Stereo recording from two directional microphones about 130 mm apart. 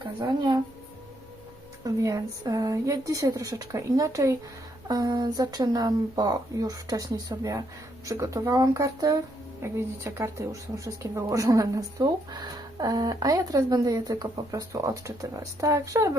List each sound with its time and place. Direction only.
0.0 s speech: 30° right (ahead or behind)
1.8 s speech: 25° right (ahead or behind)